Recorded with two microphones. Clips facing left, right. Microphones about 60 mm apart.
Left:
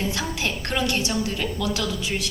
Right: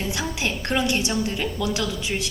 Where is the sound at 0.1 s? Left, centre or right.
Centre.